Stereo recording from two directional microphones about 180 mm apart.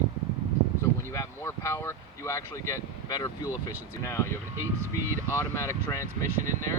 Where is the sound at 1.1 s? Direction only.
15° left (ahead or behind).